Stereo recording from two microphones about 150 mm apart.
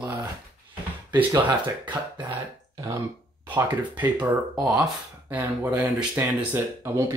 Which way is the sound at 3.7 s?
10° right (ahead or behind).